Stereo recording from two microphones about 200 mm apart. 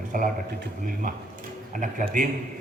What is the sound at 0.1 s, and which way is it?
A man's voice, 40° right (ahead or behind).